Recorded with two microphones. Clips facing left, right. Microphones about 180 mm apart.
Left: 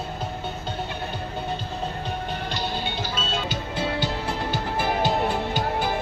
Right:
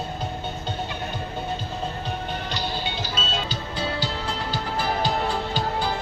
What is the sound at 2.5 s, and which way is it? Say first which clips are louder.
Music: even; 55° left (ahead or behind).